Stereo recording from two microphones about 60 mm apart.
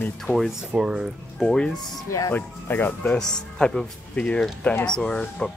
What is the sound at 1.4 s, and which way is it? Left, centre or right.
Speech, centre.